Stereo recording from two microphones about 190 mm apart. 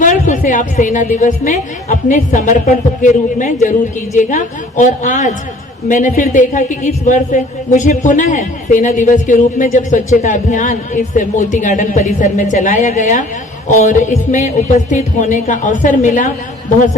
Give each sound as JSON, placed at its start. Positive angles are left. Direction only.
{"t": 0.0, "sound": "a woman's voice", "side_deg": 40}